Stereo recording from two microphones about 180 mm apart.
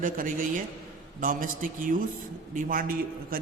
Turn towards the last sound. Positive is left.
turn(degrees=-50)  # may be behind; listen again after turning